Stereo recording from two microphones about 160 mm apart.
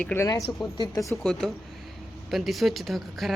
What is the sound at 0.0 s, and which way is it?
Speech, 10° left (ahead or behind).